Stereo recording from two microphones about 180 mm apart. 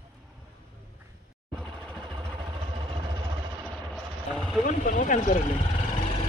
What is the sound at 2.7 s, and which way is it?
Vehicle, 25° right (ahead or behind).